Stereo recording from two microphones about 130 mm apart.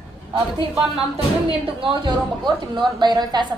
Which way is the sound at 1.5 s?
45° right (ahead or behind).